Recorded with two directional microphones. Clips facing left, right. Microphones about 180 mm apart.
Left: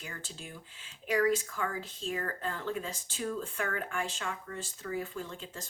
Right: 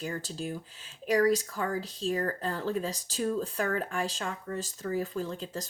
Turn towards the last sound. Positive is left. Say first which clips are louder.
# right 7 dB
turn(degrees=-40)  # may be behind; listen again after turning